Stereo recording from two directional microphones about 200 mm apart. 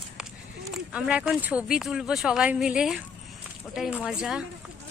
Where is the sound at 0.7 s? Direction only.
5° right (ahead or behind).